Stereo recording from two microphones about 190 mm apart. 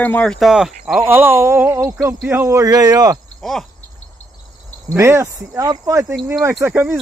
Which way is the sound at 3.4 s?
Centre (ahead or behind).